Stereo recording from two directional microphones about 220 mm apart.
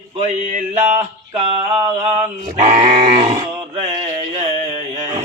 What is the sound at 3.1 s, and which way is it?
Speech, 20° right (ahead or behind).